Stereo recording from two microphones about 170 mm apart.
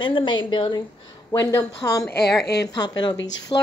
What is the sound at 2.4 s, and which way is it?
Speech, 70° left (ahead or behind).